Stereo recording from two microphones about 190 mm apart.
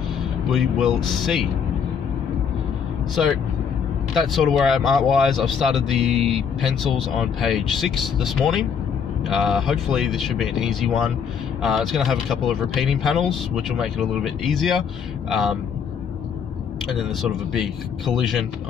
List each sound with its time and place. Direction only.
0.5 s speech: centre (ahead or behind)
4.1 s speech: centre (ahead or behind)
6.1 s speech: 35° right (ahead or behind)
6.8 s speech: centre (ahead or behind)
16.8 s speech: centre (ahead or behind)